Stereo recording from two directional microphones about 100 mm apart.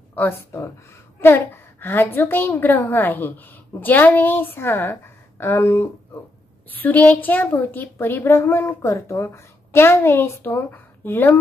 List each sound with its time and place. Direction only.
0.1 s a woman's voice: 20° left (ahead or behind)